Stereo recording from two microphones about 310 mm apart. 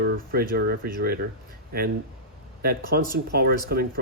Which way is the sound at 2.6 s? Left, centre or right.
Right.